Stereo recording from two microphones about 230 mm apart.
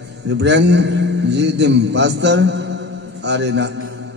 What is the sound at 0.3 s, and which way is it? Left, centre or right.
A man's voice, right.